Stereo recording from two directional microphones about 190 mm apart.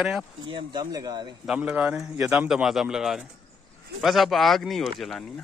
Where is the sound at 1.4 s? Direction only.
5° right (ahead or behind).